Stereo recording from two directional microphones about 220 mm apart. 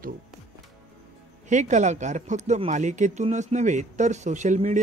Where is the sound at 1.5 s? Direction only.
35° right (ahead or behind).